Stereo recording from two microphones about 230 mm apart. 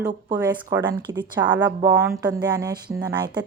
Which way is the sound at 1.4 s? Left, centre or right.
Centre.